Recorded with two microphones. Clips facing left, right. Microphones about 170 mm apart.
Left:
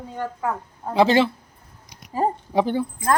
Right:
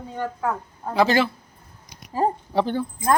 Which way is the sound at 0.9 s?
25° left (ahead or behind).